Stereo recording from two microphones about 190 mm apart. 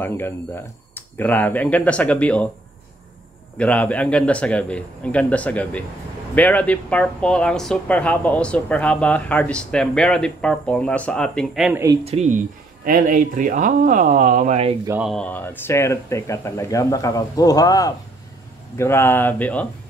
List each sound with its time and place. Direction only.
0.0 s speech: 10° left (ahead or behind)
3.5 s speech: 5° left (ahead or behind)
12.0 s speech: 35° right (ahead or behind)
12.8 s speech: 45° right (ahead or behind)
14.9 s speech: 5° right (ahead or behind)
15.1 s speech: 10° left (ahead or behind)